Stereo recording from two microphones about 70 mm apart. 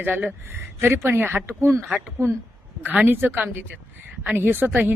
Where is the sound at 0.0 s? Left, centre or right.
Right.